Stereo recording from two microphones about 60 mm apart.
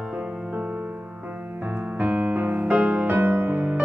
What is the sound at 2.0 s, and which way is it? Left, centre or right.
Music, right.